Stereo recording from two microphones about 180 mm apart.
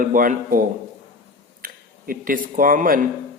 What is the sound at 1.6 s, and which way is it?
Speech, 50° right (ahead or behind).